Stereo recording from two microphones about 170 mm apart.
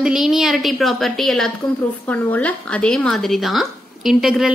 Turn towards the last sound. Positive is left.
turn(degrees=-5)  # may be behind; listen again after turning